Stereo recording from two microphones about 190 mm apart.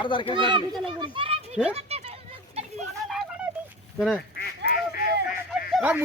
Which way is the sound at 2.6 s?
35° right (ahead or behind).